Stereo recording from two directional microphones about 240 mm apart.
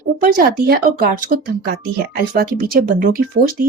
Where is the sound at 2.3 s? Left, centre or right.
Right.